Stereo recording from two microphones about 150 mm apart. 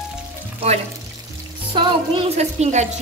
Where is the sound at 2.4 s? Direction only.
50° right (ahead or behind).